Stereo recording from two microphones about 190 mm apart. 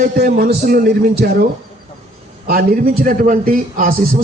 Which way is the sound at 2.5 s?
50° right (ahead or behind).